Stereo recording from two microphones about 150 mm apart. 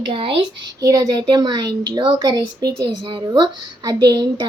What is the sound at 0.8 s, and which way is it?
A woman's voice, 25° right (ahead or behind).